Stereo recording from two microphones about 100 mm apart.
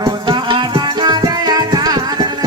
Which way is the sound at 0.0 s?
45° right (ahead or behind).